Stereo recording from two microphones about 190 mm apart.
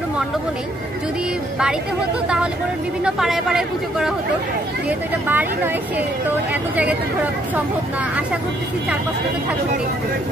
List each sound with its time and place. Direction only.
2.2 s speech: 5° right (ahead or behind)
6.5 s speech: 5° right (ahead or behind)